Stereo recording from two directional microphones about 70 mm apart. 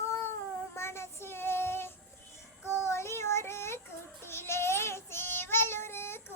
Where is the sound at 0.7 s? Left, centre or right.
Left.